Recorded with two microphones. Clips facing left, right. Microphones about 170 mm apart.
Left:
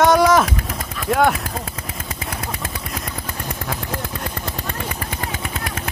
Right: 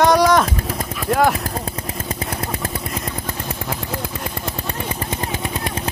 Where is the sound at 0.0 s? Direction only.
Centre (ahead or behind).